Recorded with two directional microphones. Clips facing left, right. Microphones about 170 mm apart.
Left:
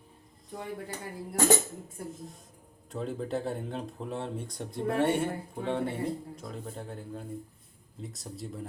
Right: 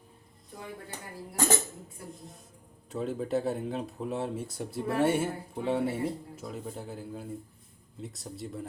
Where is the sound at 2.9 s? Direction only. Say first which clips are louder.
Right 3 dB; centre (ahead or behind).